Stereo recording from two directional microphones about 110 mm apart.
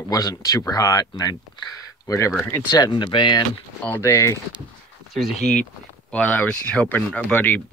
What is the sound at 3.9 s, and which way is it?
Speech, 25° left (ahead or behind).